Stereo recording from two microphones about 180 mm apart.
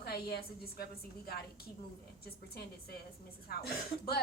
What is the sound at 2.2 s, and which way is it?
A woman's voice, 60° left (ahead or behind).